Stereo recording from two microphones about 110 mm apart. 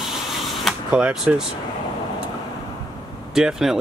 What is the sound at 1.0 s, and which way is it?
Speech, 10° right (ahead or behind).